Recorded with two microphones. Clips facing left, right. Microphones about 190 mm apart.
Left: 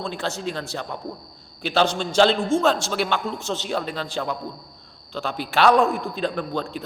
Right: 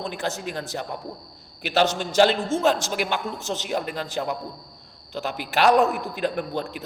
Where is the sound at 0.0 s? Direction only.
15° right (ahead or behind).